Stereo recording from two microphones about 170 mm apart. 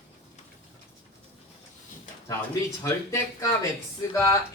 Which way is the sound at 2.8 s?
15° left (ahead or behind).